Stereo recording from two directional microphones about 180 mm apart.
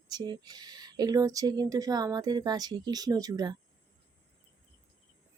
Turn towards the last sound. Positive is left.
turn(degrees=-20)  # may be behind; listen again after turning